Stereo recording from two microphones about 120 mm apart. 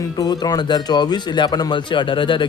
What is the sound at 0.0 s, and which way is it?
A man's voice, 35° left (ahead or behind).